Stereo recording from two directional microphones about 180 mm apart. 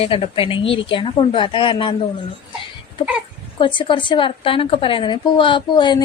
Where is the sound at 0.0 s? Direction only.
30° left (ahead or behind).